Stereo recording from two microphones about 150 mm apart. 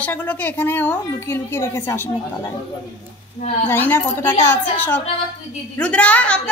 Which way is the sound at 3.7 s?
15° left (ahead or behind).